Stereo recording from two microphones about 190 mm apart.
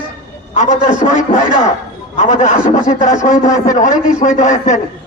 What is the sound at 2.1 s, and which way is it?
A man's voice, 40° left (ahead or behind).